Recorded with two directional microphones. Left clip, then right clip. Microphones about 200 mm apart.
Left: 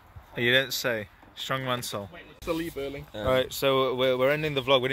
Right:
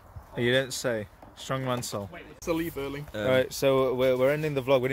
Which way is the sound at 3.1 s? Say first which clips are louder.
Right 2 dB; 20° right (ahead or behind).